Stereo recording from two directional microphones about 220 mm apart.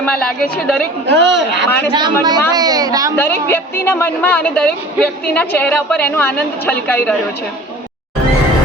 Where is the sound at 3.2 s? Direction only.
10° left (ahead or behind).